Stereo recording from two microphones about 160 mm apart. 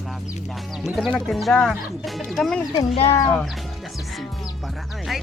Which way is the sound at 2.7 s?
35° left (ahead or behind).